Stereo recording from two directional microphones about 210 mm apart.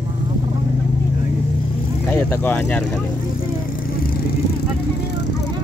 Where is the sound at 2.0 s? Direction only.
10° left (ahead or behind).